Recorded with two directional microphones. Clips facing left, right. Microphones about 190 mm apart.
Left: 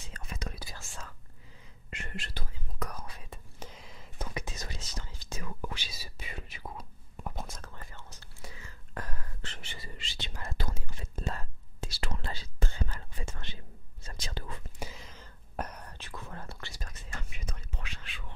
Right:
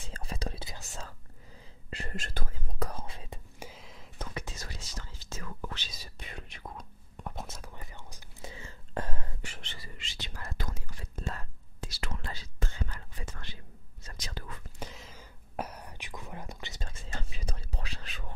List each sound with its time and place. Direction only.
0.1 s whispering: 35° right (ahead or behind)
1.9 s whispering: 35° right (ahead or behind)
2.8 s whispering: 25° right (ahead or behind)
3.5 s a sound: 5° right (ahead or behind)
4.3 s whispering: 15° left (ahead or behind)
7.5 s whispering: 15° right (ahead or behind)
8.5 s whispering: 25° right (ahead or behind)
9.8 s whispering: 30° left (ahead or behind)
14.8 s whispering: centre (ahead or behind); by 16.9 s 20° right (ahead or behind)
17.1 s whispering: 30° right (ahead or behind)